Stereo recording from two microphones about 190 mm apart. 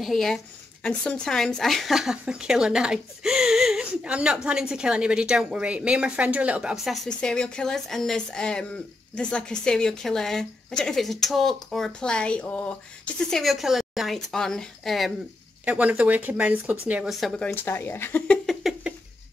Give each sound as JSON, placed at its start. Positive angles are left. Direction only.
{"t": 0.0, "sound": "speech", "side_deg": 0}